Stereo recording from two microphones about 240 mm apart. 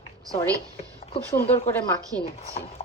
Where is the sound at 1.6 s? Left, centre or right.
Centre.